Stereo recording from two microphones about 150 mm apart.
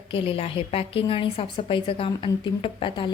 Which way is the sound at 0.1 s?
40° left (ahead or behind).